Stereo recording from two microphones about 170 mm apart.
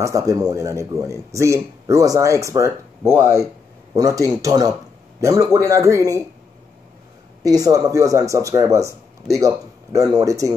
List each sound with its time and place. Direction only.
0.0 s speech: 20° right (ahead or behind)
7.4 s speech: 20° right (ahead or behind)